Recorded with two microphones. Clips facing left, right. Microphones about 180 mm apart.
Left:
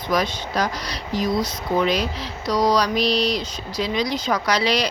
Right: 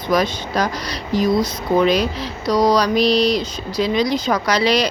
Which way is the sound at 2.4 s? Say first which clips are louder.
Right 4 dB; 55° right (ahead or behind).